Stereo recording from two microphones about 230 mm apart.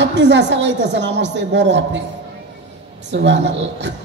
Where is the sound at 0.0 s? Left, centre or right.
Right.